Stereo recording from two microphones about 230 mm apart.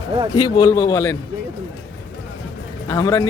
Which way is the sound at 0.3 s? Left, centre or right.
Centre.